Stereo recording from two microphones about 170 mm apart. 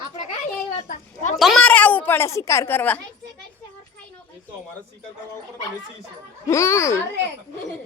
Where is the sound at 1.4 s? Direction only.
Centre (ahead or behind).